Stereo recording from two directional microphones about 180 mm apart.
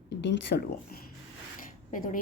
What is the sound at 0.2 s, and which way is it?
Speech, 70° left (ahead or behind).